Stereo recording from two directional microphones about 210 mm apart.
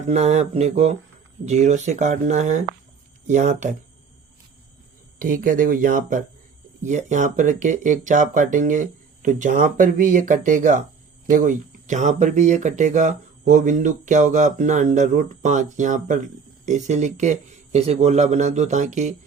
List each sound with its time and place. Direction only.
0.1 s speech: 30° right (ahead or behind)
5.2 s speech: 40° right (ahead or behind)